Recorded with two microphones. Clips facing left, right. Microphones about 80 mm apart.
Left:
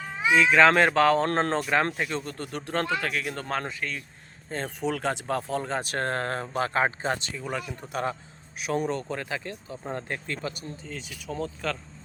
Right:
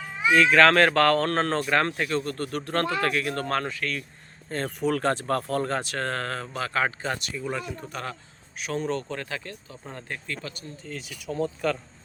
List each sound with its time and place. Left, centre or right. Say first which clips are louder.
0.3 s a man's voice: right 1 dB; centre
1.2 s a man's voice: even; left
4.9 s a man's voice: right 4 dB; centre
5.9 s speech: left 1 dB; left
10.8 s speech: right 4 dB; centre